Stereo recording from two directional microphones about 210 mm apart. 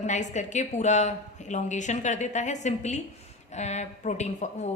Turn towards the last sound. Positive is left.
turn(degrees=35)  # may be behind; listen again after turning